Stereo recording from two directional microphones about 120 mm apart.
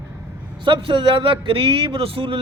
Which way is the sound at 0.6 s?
45° right (ahead or behind).